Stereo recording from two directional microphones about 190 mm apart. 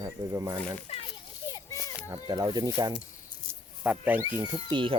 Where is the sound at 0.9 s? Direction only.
35° left (ahead or behind).